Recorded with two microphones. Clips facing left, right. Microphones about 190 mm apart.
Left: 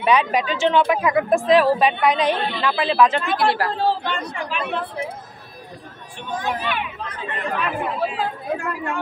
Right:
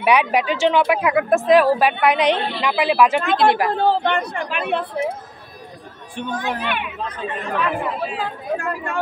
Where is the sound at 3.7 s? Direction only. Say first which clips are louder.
Right 4 dB; 60° right (ahead or behind).